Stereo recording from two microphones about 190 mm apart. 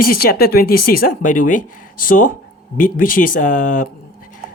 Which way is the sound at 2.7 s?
45° left (ahead or behind).